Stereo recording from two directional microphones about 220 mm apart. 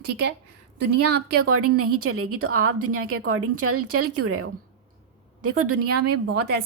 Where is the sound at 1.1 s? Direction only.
45° right (ahead or behind).